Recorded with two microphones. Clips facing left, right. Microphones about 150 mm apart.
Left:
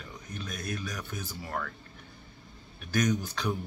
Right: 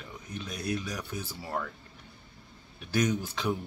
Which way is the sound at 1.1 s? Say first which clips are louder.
Right 1 dB; 30° right (ahead or behind).